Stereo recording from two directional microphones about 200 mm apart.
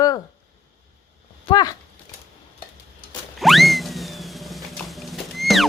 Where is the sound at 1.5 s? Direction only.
20° left (ahead or behind).